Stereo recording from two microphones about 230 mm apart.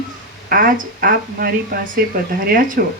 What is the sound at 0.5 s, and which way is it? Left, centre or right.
Speech, right.